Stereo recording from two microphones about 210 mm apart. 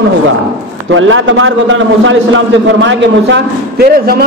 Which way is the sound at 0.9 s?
70° right (ahead or behind).